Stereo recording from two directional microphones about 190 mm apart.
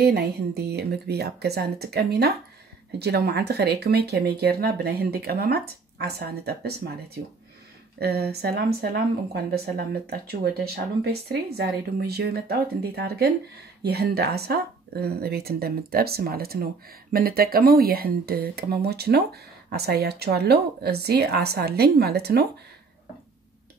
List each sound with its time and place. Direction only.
0.0 s speech: 55° right (ahead or behind)
8.0 s speech: 55° right (ahead or behind)